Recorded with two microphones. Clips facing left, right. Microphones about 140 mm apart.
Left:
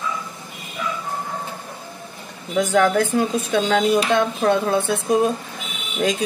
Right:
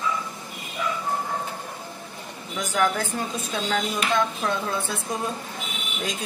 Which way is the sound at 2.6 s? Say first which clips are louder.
Left 7 dB; 60° left (ahead or behind).